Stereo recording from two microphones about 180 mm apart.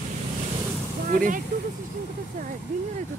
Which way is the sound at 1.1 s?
50° right (ahead or behind).